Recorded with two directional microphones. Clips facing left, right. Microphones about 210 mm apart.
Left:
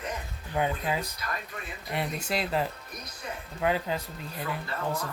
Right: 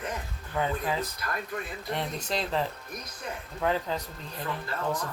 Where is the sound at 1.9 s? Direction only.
5° left (ahead or behind).